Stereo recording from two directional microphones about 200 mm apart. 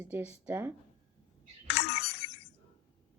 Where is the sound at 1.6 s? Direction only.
30° left (ahead or behind).